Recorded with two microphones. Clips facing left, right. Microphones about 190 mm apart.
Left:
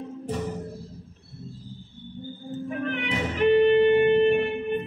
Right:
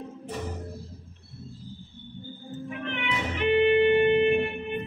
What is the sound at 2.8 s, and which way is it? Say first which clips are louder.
Music: left 3 dB; 40° left (ahead or behind).